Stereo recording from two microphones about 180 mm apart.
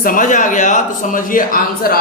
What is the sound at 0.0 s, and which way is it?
A man's voice, 50° left (ahead or behind).